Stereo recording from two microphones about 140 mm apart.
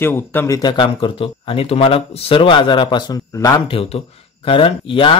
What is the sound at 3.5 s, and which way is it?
Speech, 40° left (ahead or behind).